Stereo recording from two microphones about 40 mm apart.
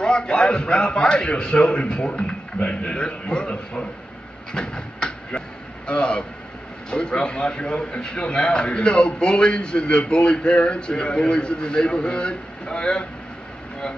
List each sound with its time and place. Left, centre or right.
0.0 s a man's voice: left
4.5 s a sound: left
5.9 s a man's voice: left